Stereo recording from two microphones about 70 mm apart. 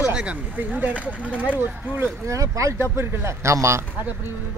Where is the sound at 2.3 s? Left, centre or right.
Right.